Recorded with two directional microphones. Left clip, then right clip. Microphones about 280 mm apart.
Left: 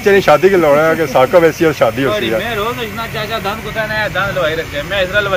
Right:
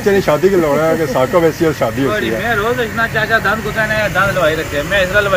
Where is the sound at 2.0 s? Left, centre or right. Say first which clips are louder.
Left 1 dB; left.